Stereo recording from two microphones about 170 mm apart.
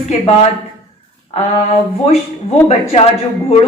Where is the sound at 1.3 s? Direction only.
40° left (ahead or behind).